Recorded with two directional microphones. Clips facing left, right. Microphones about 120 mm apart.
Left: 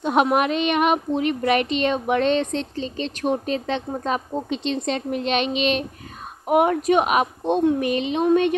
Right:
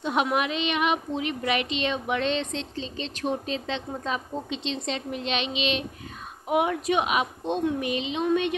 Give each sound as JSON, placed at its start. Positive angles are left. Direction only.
{"t": 0.0, "sound": "speech", "side_deg": 50}